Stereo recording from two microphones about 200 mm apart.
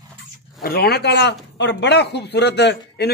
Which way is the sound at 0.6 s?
50° left (ahead or behind).